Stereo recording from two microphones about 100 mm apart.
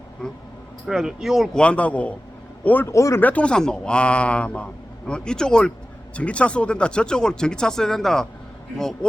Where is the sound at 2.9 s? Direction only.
30° left (ahead or behind).